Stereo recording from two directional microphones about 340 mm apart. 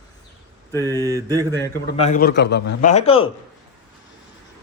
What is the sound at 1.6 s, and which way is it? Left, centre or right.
A man's voice, centre.